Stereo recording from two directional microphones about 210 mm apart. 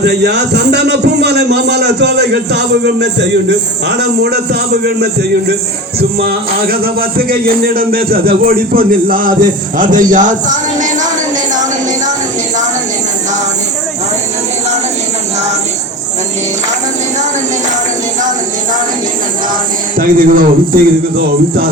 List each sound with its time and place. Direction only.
0.0 s music: 50° right (ahead or behind)
6.1 s music: 45° right (ahead or behind)
18.2 s a sound: 35° right (ahead or behind)
20.0 s music: 40° right (ahead or behind)